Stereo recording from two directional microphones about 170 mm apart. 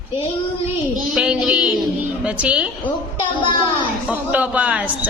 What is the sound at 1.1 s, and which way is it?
A woman's voice, 5° right (ahead or behind).